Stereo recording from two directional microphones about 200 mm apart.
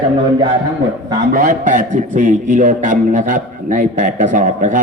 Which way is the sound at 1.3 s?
40° right (ahead or behind).